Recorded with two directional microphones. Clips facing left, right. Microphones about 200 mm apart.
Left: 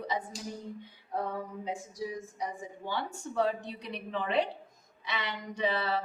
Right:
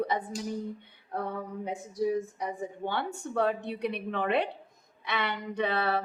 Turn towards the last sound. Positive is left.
turn(degrees=-60)  # may be behind; listen again after turning